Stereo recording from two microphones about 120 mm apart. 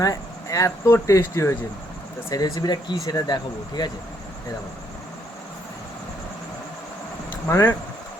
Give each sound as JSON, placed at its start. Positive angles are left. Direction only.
{"t": 0.0, "sound": "speech", "side_deg": 30}
{"t": 7.4, "sound": "speech", "side_deg": 20}